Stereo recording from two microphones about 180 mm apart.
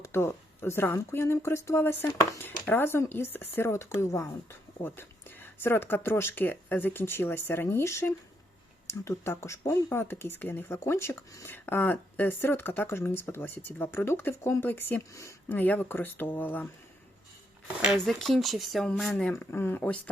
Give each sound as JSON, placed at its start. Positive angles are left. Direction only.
{"t": 0.0, "sound": "speech", "side_deg": 15}
{"t": 17.9, "sound": "speech", "side_deg": 5}